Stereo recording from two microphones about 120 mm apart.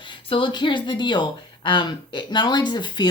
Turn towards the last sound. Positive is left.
turn(degrees=40)  # may be behind; listen again after turning